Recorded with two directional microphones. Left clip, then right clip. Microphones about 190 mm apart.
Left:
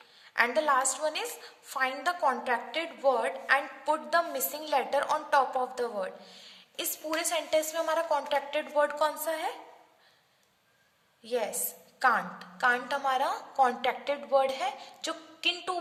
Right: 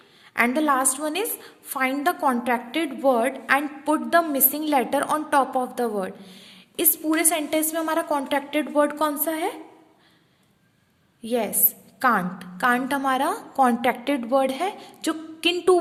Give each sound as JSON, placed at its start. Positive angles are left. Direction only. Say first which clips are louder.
{"t": 0.3, "sound": "a woman's voice", "louder": "right 5 dB", "side_deg": -35}
{"t": 11.2, "sound": "a woman's voice", "louder": "right 6 dB", "side_deg": -35}